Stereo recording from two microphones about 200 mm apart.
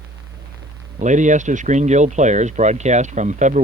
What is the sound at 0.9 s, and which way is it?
Speech, 40° right (ahead or behind).